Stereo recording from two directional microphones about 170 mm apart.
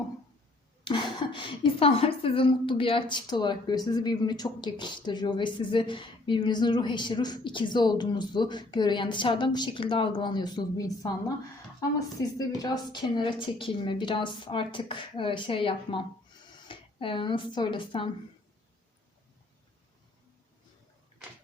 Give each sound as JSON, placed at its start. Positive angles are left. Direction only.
{"t": 0.9, "sound": "a woman's voice", "side_deg": 30}
{"t": 12.4, "sound": "a woman's voice", "side_deg": 25}